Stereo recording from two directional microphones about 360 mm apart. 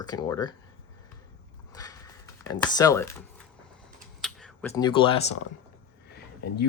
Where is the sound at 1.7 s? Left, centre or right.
Centre.